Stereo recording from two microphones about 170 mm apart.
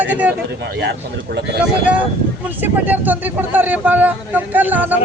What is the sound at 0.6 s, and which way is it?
Speech, 90° right.